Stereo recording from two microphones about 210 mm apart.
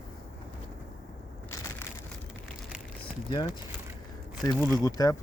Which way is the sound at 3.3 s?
20° left (ahead or behind).